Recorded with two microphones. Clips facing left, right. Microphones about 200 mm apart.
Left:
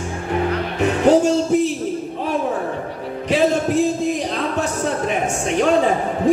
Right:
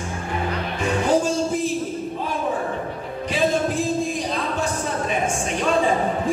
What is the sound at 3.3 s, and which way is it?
Music, 70° left (ahead or behind).